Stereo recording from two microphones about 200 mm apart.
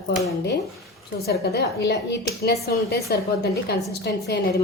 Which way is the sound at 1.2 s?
55° left (ahead or behind).